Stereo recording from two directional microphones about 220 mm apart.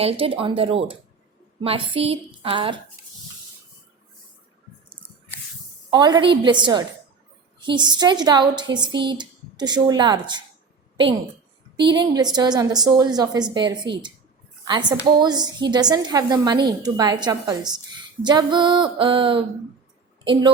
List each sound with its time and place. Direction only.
0.0 s a woman's voice: 25° right (ahead or behind)
5.9 s a woman's voice: 20° right (ahead or behind)
11.8 s a woman's voice: 20° right (ahead or behind)